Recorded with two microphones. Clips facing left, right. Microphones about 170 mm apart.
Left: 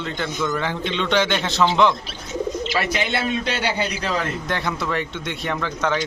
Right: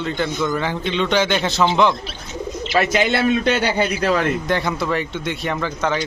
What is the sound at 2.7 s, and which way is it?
A man's voice, 55° right (ahead or behind).